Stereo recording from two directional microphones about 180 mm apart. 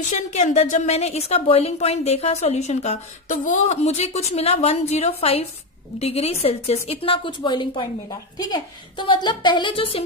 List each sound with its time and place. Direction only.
0.0 s a woman's voice: 40° left (ahead or behind)